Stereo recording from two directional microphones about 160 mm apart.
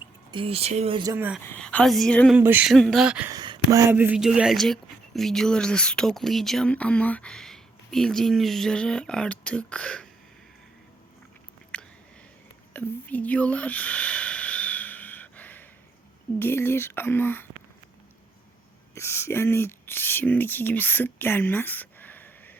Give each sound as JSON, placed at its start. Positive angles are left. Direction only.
{"t": 0.3, "sound": "speech", "side_deg": -35}
{"t": 1.0, "sound": "speech", "side_deg": -15}
{"t": 1.5, "sound": "speech", "side_deg": 10}
{"t": 2.4, "sound": "speech", "side_deg": -15}
{"t": 2.6, "sound": "speech", "side_deg": 0}
{"t": 3.2, "sound": "speech", "side_deg": -25}
{"t": 11.7, "sound": "a sound", "side_deg": 5}
{"t": 16.4, "sound": "speech", "side_deg": 15}
{"t": 18.9, "sound": "speech", "side_deg": 15}